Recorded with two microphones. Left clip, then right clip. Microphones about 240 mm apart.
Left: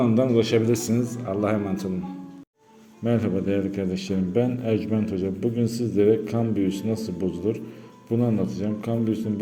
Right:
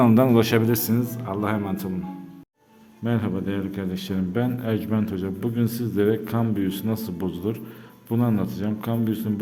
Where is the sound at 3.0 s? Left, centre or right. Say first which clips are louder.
Left 3 dB; centre.